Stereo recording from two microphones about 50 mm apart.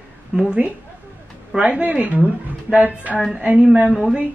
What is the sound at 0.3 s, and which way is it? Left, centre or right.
Speech, centre.